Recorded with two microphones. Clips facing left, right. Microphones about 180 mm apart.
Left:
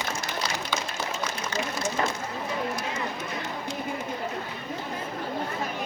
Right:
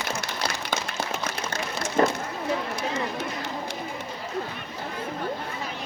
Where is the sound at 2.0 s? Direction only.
45° right (ahead or behind).